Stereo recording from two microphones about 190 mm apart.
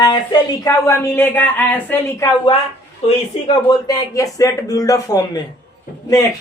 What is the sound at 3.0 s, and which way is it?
Speech, 25° left (ahead or behind).